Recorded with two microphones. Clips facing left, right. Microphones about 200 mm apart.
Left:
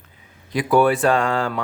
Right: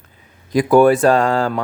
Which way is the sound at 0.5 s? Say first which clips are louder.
Right 6 dB; 45° right (ahead or behind).